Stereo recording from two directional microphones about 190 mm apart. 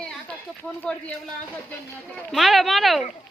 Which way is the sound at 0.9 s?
5° left (ahead or behind).